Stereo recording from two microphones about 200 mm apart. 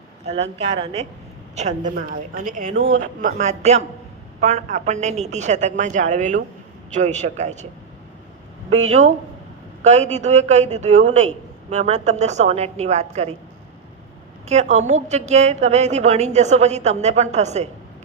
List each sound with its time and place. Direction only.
0.3 s a man's voice: 35° right (ahead or behind)
8.9 s a man's voice: 35° right (ahead or behind)
14.4 s a man's voice: 35° right (ahead or behind)